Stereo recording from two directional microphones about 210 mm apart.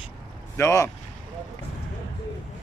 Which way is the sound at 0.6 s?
15° left (ahead or behind).